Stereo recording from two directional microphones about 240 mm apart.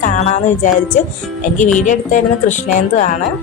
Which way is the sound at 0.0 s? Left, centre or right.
Left.